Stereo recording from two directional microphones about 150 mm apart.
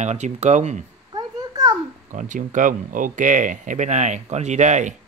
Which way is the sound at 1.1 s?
25° right (ahead or behind).